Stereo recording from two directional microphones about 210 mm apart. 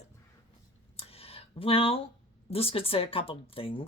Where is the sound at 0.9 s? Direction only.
30° left (ahead or behind).